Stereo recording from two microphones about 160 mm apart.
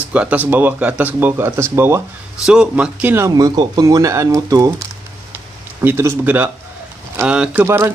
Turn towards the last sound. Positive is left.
turn(degrees=-15)  # may be behind; listen again after turning